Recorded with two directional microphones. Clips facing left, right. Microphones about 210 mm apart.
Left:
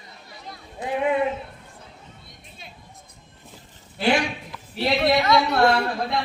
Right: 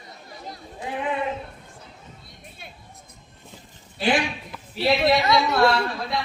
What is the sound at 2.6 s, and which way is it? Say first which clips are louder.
Music: even; 55° right (ahead or behind).